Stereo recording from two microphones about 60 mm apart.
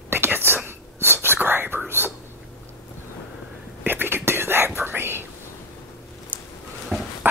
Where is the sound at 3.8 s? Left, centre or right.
Right.